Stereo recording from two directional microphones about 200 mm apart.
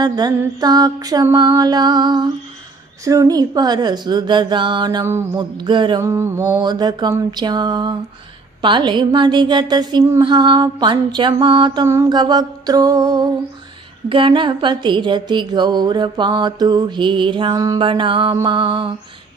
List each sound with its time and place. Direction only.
0.0 s a woman's voice: 20° right (ahead or behind)
5.4 s a woman's voice: 25° right (ahead or behind)